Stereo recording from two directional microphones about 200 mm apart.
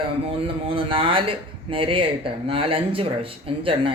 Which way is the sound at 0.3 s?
25° right (ahead or behind).